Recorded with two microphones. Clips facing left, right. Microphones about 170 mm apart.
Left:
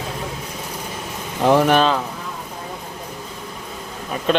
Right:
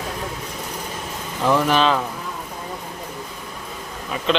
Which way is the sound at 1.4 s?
60° left (ahead or behind).